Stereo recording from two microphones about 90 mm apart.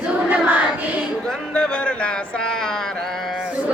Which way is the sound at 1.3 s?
10° left (ahead or behind).